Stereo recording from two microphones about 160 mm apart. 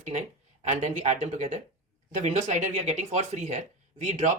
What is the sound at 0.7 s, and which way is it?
Speech, 50° right (ahead or behind).